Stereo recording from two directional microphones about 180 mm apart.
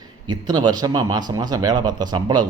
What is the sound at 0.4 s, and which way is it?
Speech, 20° right (ahead or behind).